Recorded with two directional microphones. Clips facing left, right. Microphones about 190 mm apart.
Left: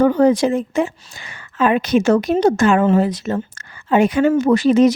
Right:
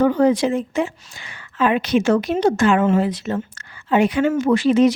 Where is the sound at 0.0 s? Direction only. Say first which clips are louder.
Left 2 dB; 45° left (ahead or behind).